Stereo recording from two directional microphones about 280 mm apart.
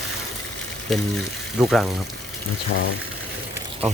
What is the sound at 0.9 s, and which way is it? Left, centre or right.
Speech, centre.